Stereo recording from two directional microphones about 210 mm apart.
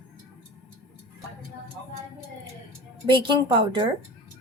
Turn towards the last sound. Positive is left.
turn(degrees=-25)  # may be behind; listen again after turning